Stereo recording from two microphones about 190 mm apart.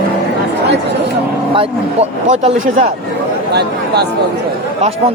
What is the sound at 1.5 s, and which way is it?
A man's voice, 30° right (ahead or behind).